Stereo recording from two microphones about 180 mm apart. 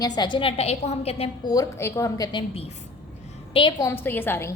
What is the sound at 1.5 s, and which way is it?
Speech, 15° left (ahead or behind).